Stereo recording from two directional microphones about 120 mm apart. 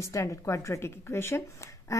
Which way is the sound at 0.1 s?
25° left (ahead or behind).